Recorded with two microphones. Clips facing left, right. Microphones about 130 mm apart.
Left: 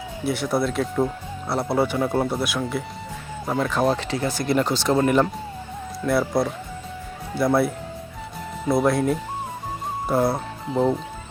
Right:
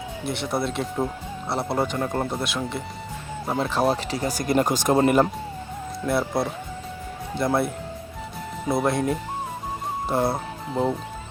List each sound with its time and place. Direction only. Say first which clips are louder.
0.3 s speech: left 4 dB; centre (ahead or behind)
3.6 s speech: left 1 dB; 30° right (ahead or behind)
5.0 s speech: even; 5° right (ahead or behind)
8.7 s speech: left 3 dB; centre (ahead or behind)